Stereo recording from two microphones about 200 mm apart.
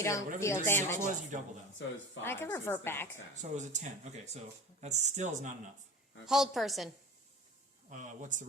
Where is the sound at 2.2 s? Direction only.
10° left (ahead or behind).